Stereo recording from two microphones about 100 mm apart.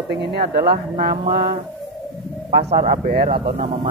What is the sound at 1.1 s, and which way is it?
Speech, 55° right (ahead or behind).